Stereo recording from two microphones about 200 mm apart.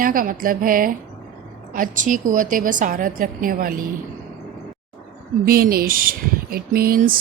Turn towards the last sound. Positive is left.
turn(degrees=-45)  # may be behind; listen again after turning